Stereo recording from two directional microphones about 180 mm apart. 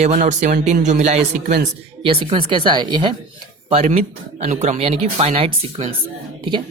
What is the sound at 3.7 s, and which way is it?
Speech, 40° right (ahead or behind).